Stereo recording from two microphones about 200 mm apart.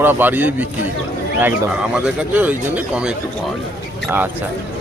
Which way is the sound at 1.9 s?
5° right (ahead or behind).